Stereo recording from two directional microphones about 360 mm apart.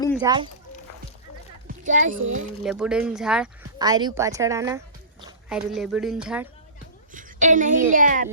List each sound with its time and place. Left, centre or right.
0.2 s speech: centre
1.6 s a sound: right
2.6 s a woman's voice: centre
7.1 s a woman's voice: right